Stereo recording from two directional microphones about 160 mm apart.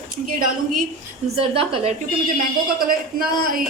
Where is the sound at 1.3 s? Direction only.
35° right (ahead or behind).